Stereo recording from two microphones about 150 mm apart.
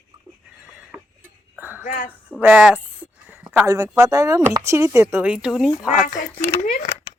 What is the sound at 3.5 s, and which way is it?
Speech, 20° right (ahead or behind).